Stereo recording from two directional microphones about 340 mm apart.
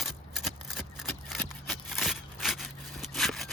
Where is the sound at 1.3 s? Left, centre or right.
Centre.